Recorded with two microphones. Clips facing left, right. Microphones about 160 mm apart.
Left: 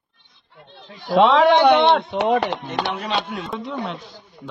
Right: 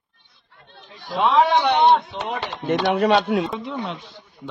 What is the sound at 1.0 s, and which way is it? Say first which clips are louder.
Speech: left 4 dB; 90° left.